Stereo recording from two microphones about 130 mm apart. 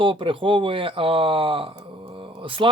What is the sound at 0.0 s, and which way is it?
Speech, 40° right (ahead or behind).